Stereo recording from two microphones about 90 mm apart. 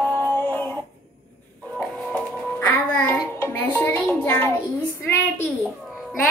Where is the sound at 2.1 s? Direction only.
20° left (ahead or behind).